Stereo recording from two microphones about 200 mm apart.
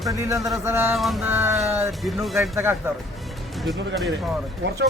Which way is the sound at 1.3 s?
10° right (ahead or behind).